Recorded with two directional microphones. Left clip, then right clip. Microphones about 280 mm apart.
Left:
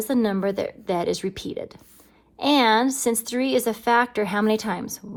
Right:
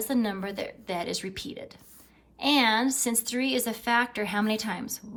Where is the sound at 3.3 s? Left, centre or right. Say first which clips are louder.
Left 4 dB; left.